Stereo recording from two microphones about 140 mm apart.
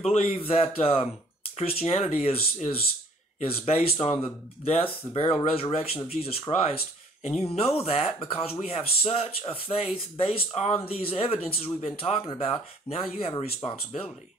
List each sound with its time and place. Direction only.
0.0 s speech: 45° left (ahead or behind)
6.5 s speech: 30° left (ahead or behind)
7.2 s speech: 50° left (ahead or behind)